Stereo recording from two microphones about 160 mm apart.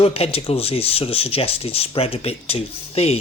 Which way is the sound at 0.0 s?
35° left (ahead or behind).